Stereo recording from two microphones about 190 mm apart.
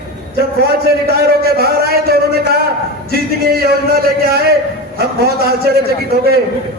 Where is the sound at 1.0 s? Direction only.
55° right (ahead or behind).